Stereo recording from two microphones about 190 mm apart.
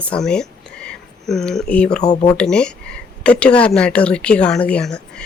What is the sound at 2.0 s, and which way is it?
Speech, 20° left (ahead or behind).